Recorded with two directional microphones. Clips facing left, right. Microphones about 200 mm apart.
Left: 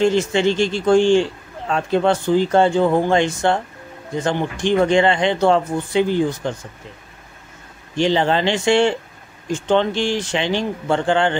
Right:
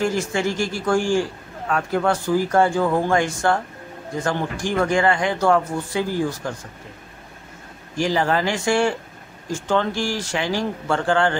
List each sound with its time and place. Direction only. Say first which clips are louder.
0.0 s a man's voice: left 6 dB; 20° left (ahead or behind)
7.9 s a man's voice: left 3 dB; 25° left (ahead or behind)